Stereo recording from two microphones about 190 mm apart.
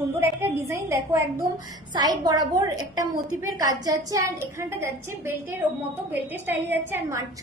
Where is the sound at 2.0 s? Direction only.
20° right (ahead or behind).